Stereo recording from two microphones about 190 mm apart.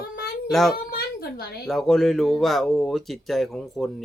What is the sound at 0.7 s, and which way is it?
Speech, 55° left (ahead or behind).